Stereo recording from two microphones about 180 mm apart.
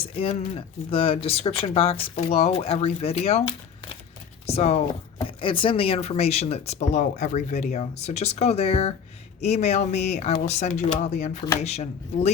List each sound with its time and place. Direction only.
0.0 s speech: 30° left (ahead or behind)